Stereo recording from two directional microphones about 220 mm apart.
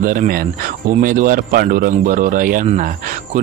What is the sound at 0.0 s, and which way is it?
Speech, 40° right (ahead or behind).